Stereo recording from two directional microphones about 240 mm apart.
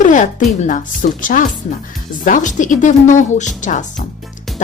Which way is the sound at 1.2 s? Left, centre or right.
Left.